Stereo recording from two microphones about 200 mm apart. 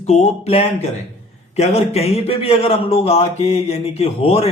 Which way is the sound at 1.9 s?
30° left (ahead or behind).